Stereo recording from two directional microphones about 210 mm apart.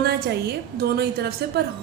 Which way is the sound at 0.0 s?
50° right (ahead or behind).